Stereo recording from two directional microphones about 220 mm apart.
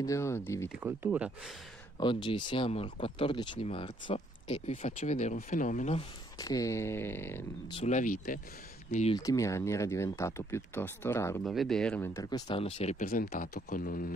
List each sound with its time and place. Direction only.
0.0 s speech: 15° left (ahead or behind)
0.7 s speech: 5° right (ahead or behind)
2.0 s speech: 20° left (ahead or behind)
6.3 s speech: 15° left (ahead or behind)
7.7 s speech: 30° left (ahead or behind)
9.2 s speech: 15° left (ahead or behind)
11.4 s speech: centre (ahead or behind); by 12.9 s 25° left (ahead or behind)
13.0 s speech: 40° left (ahead or behind)